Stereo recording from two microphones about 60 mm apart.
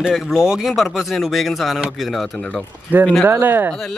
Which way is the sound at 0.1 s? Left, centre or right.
Centre.